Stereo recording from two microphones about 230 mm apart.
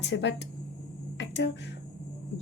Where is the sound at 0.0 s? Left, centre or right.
Left.